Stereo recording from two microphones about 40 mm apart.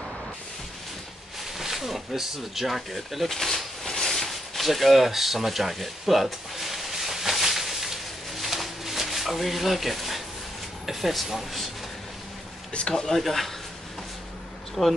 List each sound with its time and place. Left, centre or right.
1.6 s a sound: centre
10.9 s speech: centre
12.7 s speech: centre
13.0 s speech: centre
14.8 s speech: centre